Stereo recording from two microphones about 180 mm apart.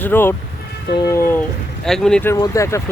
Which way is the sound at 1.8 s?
5° left (ahead or behind).